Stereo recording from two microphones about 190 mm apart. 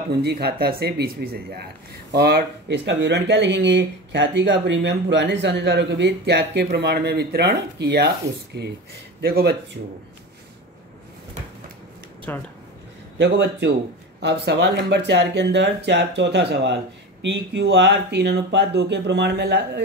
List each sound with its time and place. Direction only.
0.1 s speech: 55° right (ahead or behind)
9.2 s speech: 55° right (ahead or behind)
12.3 s speech: 10° left (ahead or behind)
13.2 s speech: 65° right (ahead or behind)